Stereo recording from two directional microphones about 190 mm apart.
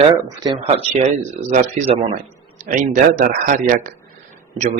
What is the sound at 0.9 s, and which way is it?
Speech, 40° right (ahead or behind).